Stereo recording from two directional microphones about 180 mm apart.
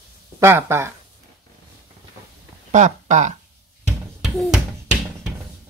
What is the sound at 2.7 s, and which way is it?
Speech, 45° right (ahead or behind).